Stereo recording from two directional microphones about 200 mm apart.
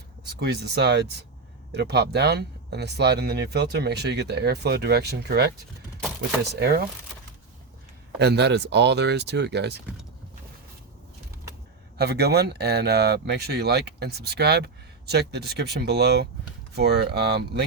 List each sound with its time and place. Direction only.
0.3 s speech: 55° right (ahead or behind)
8.2 s speech: 55° right (ahead or behind)
11.9 s speech: 55° right (ahead or behind)